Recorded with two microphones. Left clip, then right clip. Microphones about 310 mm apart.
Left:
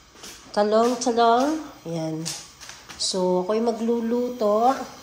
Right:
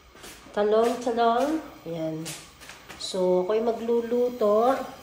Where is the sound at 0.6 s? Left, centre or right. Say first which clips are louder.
Left 2 dB; centre.